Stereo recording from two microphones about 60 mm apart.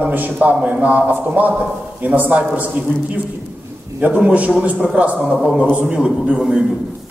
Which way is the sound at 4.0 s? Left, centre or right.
Right.